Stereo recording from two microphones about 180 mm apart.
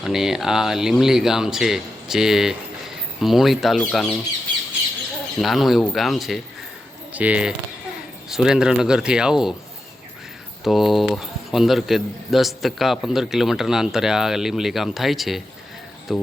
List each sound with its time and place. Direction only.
0.0 s speech: centre (ahead or behind)
5.4 s speech: centre (ahead or behind)
10.6 s speech: centre (ahead or behind)